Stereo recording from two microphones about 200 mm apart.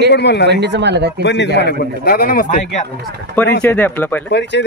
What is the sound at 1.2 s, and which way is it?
A man's voice, 60° left (ahead or behind).